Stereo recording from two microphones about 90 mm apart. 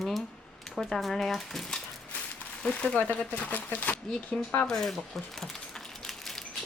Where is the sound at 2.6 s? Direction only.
15° left (ahead or behind).